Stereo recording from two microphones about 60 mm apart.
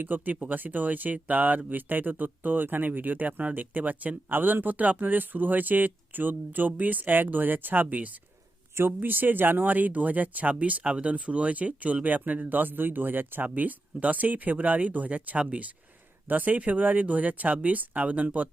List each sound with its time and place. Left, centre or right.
0.0 s speech: right